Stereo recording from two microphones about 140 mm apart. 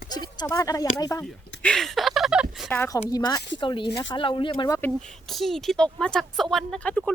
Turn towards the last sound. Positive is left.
turn(degrees=10)  # may be behind; listen again after turning